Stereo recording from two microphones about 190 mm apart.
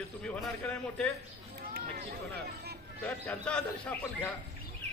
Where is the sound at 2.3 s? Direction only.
55° right (ahead or behind).